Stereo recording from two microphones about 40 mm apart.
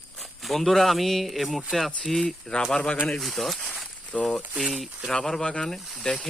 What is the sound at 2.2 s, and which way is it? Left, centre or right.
Speech, left.